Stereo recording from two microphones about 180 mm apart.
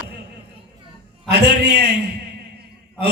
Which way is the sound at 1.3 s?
70° right (ahead or behind).